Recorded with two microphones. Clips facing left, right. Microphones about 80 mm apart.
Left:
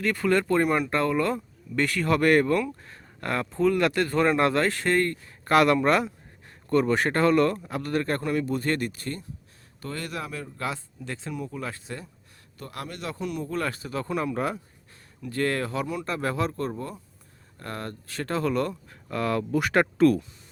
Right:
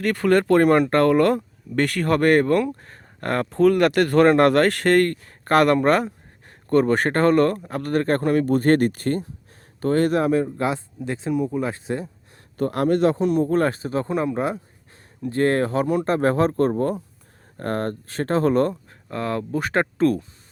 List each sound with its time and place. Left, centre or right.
0.0 s speech: right
3.5 s speech: right
12.5 s speech: right